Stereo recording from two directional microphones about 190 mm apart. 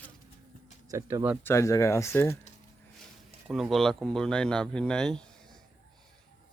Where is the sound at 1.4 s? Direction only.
15° left (ahead or behind).